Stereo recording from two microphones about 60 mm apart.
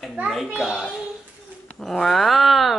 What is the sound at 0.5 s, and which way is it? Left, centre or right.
Speech, centre.